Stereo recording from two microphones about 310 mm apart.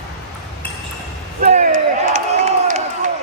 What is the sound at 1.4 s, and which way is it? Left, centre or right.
Crowd, right.